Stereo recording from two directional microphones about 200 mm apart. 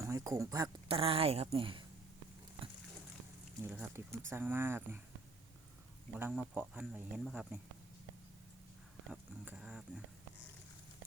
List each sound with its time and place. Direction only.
0.0 s speech: 15° right (ahead or behind)
0.9 s a woman's voice: 30° right (ahead or behind)
3.6 s speech: 10° right (ahead or behind)
6.1 s speech: 5° right (ahead or behind)
9.4 s speech: 5° right (ahead or behind)